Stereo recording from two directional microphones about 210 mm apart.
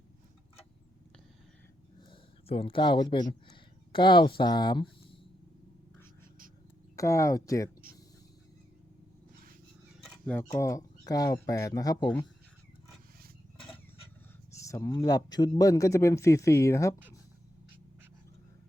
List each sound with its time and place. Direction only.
2.0 s speech: 25° left (ahead or behind)
6.9 s a man's voice: 15° left (ahead or behind)
10.2 s a man's voice: 10° left (ahead or behind)
14.5 s a man's voice: 15° left (ahead or behind)